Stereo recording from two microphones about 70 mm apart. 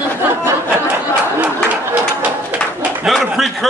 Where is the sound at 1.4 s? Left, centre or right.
Right.